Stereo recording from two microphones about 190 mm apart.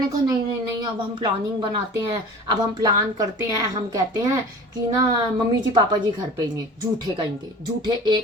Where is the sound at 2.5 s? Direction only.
20° right (ahead or behind).